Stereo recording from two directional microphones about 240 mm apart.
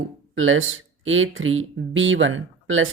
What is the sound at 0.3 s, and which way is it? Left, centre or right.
Speech, right.